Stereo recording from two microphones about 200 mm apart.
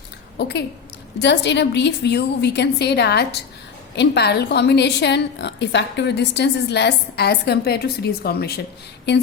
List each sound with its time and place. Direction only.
0.3 s a woman's voice: 55° left (ahead or behind)